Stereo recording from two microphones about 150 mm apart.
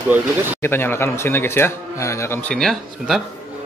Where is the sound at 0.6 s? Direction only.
15° left (ahead or behind); by 3.2 s centre (ahead or behind).